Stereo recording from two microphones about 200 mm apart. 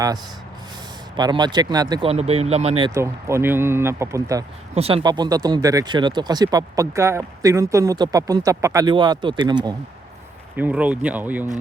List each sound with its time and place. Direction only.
1.1 s speech: 20° right (ahead or behind)
4.7 s speech: 30° right (ahead or behind)
5.0 s speech: 20° right (ahead or behind)
10.6 s speech: 5° right (ahead or behind)